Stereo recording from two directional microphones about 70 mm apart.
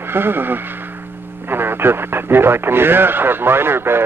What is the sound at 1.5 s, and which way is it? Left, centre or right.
Radio, right.